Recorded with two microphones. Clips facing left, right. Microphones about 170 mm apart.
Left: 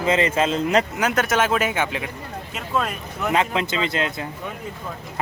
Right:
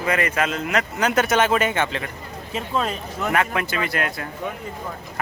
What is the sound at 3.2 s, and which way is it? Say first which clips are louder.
Speech: left 1 dB; 20° left (ahead or behind).